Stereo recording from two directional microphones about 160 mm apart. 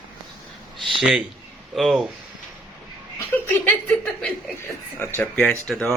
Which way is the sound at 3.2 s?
15° left (ahead or behind).